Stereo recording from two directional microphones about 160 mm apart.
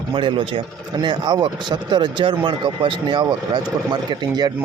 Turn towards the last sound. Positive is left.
turn(degrees=-25)  # may be behind; listen again after turning